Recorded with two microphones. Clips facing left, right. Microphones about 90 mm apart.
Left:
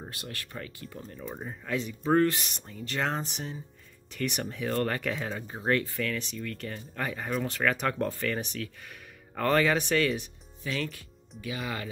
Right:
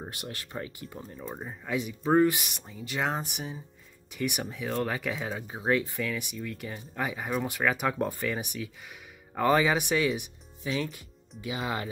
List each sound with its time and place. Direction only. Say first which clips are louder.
0.0 s speech: right 2 dB; 20° right (ahead or behind)
1.2 s speech: even; 5° right (ahead or behind)
10.9 s speech: even; 20° right (ahead or behind)